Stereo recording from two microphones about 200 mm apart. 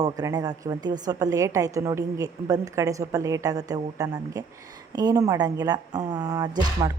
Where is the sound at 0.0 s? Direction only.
20° right (ahead or behind).